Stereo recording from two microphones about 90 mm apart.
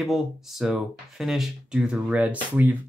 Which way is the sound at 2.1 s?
15° right (ahead or behind).